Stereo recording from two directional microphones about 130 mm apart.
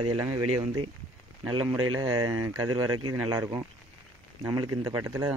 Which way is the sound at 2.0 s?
30° right (ahead or behind).